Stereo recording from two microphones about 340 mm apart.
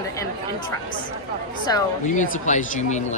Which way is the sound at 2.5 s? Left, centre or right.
Left.